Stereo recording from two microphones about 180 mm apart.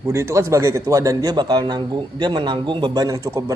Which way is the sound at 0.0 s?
15° right (ahead or behind).